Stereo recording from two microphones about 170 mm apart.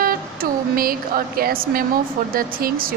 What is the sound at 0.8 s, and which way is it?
Speech, 60° right (ahead or behind).